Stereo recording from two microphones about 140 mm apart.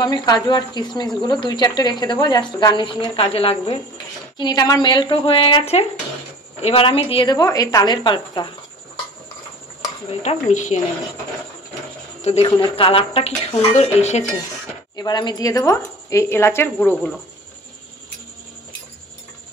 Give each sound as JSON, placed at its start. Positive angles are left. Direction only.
{"t": 0.0, "sound": "speech", "side_deg": 30}
{"t": 4.4, "sound": "a woman's voice", "side_deg": 30}
{"t": 7.2, "sound": "speech", "side_deg": 25}
{"t": 10.2, "sound": "a woman's voice", "side_deg": 60}
{"t": 12.2, "sound": "speech", "side_deg": 50}
{"t": 12.4, "sound": "speech", "side_deg": 40}
{"t": 13.7, "sound": "a woman's voice", "side_deg": 55}
{"t": 15.0, "sound": "a woman's voice", "side_deg": 30}